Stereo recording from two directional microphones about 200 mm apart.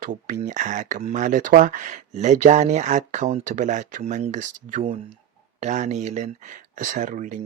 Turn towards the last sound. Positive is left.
turn(degrees=-40)  # may be behind; listen again after turning